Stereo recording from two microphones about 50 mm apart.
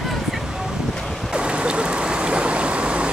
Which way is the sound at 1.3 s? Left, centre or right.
Centre.